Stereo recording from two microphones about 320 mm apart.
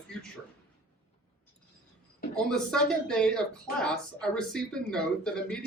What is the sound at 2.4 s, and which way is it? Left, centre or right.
Speech, centre.